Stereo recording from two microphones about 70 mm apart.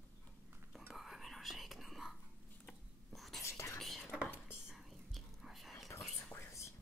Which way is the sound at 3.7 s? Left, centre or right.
Centre.